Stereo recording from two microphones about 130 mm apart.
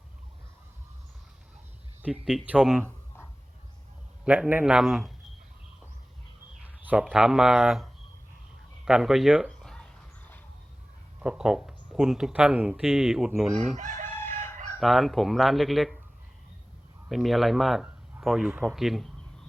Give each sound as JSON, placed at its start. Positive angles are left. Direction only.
{"t": 2.6, "sound": "speech", "side_deg": 0}
{"t": 4.2, "sound": "a man's voice", "side_deg": -10}
{"t": 6.6, "sound": "speech", "side_deg": -10}
{"t": 8.8, "sound": "a sound", "side_deg": -5}
{"t": 11.2, "sound": "speech", "side_deg": -5}
{"t": 13.7, "sound": "chicken", "side_deg": -70}
{"t": 14.8, "sound": "speech", "side_deg": 0}
{"t": 17.1, "sound": "speech", "side_deg": 0}